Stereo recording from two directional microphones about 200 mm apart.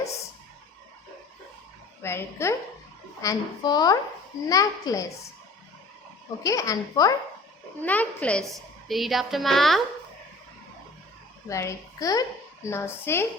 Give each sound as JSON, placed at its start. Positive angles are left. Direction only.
{"t": 2.0, "sound": "a child's voice", "side_deg": 10}
{"t": 6.4, "sound": "a child's voice", "side_deg": 15}
{"t": 7.8, "sound": "a child's voice", "side_deg": 5}
{"t": 11.4, "sound": "a child's voice", "side_deg": 15}